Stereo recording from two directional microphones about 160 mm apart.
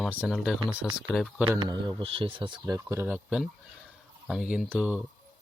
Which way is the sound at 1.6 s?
25° right (ahead or behind).